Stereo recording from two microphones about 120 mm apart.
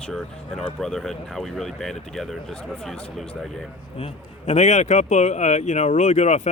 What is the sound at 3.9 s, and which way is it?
Speech, 60° left (ahead or behind).